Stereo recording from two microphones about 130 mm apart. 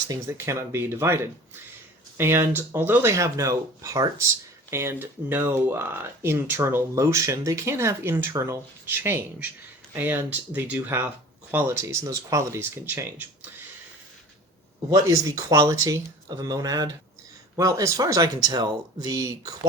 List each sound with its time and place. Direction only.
0.1 s speech: 20° right (ahead or behind)
14.8 s speech: 25° right (ahead or behind)